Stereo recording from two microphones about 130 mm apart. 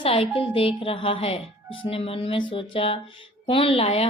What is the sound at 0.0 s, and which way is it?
Speech, 50° left (ahead or behind).